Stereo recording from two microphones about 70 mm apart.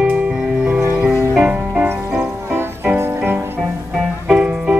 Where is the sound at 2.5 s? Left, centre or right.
Right.